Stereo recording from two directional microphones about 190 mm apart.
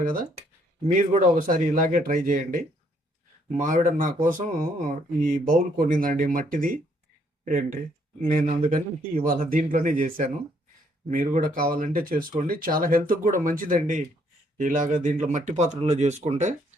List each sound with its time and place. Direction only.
0.0 s speech: 50° right (ahead or behind)